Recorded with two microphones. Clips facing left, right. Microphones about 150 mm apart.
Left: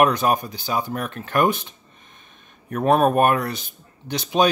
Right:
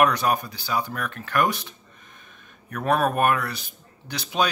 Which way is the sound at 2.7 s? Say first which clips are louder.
Left 5 dB; 25° left (ahead or behind).